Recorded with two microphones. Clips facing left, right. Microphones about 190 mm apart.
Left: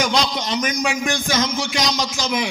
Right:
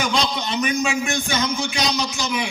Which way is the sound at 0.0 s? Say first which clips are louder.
Left 2 dB; 90° left.